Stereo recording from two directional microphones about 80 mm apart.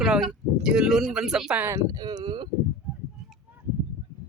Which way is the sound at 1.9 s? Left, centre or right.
Right.